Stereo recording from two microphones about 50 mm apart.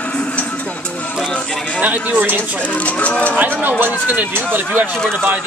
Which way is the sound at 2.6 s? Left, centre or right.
Left.